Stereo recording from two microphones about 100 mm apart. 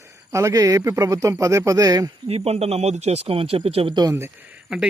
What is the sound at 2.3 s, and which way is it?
Speech, 90° right.